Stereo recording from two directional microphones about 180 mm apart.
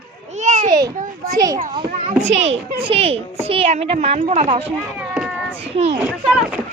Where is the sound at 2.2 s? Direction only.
40° right (ahead or behind).